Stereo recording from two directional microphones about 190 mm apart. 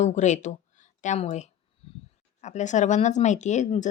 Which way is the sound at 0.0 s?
40° left (ahead or behind).